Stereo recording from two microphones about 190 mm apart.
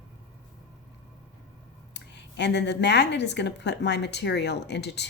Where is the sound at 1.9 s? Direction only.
65° left (ahead or behind).